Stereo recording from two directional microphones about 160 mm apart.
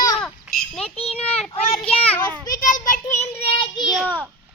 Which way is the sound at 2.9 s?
50° left (ahead or behind).